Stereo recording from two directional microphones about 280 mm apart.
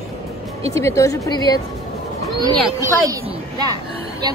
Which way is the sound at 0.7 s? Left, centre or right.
Centre.